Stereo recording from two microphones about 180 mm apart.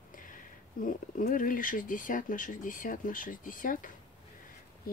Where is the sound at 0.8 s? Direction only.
50° left (ahead or behind).